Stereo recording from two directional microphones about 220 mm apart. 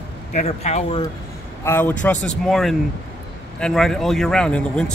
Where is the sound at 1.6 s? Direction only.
10° left (ahead or behind).